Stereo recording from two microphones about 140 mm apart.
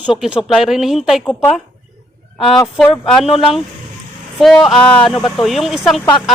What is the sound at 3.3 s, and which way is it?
Speech, 40° left (ahead or behind).